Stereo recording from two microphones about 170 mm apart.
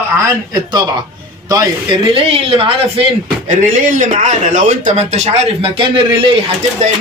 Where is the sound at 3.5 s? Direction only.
55° right (ahead or behind); by 6.4 s 30° right (ahead or behind).